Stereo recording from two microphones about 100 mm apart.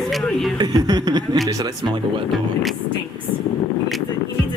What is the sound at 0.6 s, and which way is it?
Speech, 45° right (ahead or behind).